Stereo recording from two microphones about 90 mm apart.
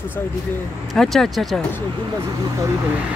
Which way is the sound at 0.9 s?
5° left (ahead or behind).